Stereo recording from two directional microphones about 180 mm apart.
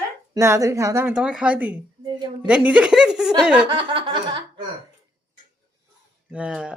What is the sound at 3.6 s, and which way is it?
Chuckle, 25° right (ahead or behind).